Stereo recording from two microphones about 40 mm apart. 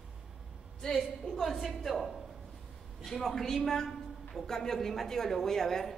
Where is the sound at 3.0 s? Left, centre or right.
Centre.